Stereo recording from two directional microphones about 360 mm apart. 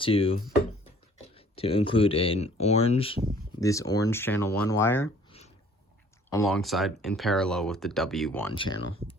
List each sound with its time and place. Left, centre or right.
0.0 s speech: centre
6.3 s speech: centre